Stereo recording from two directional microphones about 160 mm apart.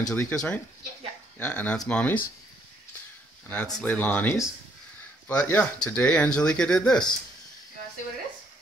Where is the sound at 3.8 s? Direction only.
10° left (ahead or behind).